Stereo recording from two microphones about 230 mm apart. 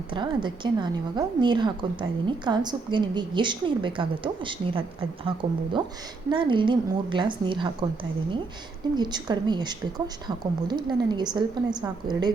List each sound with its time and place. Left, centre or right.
0.1 s a woman's voice: right
9.0 s a woman's voice: centre